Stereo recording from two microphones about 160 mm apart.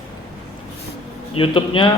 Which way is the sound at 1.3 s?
35° left (ahead or behind).